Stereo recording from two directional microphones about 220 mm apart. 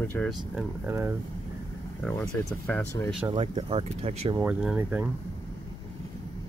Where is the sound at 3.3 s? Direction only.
25° right (ahead or behind).